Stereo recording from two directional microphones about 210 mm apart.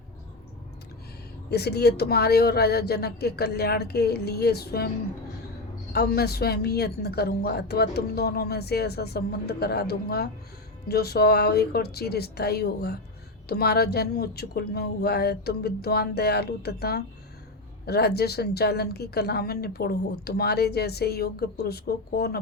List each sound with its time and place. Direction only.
1.5 s a woman's voice: 50° left (ahead or behind)
5.9 s a woman's voice: 50° left (ahead or behind)